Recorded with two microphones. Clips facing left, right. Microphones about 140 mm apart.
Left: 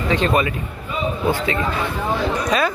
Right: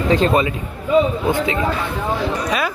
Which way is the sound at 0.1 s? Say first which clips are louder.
Right 3 dB; 40° right (ahead or behind).